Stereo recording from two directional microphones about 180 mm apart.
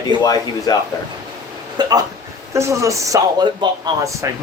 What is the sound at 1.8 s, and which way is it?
Speech, 20° right (ahead or behind).